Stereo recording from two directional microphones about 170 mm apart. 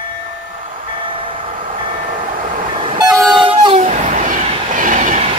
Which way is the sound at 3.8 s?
45° right (ahead or behind).